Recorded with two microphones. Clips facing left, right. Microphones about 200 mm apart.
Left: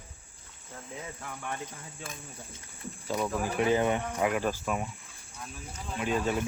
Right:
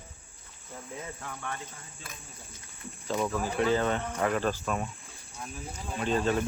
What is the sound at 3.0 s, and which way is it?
Speech, 10° left (ahead or behind).